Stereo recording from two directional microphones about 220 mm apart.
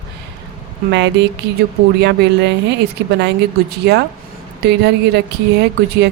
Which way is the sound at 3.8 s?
50° right (ahead or behind).